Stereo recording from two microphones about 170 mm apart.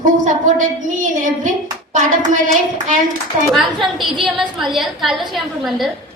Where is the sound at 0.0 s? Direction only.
50° right (ahead or behind).